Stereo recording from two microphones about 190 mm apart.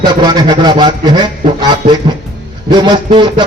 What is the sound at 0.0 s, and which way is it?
A man's voice, 20° right (ahead or behind).